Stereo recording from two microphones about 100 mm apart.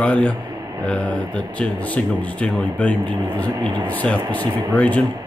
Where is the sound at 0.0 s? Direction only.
15° left (ahead or behind).